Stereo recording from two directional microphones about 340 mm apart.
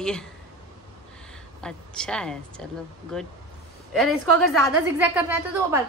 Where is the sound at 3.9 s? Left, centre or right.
Centre.